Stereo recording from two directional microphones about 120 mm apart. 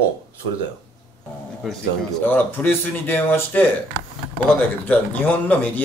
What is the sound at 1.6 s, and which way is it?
Speech, centre (ahead or behind).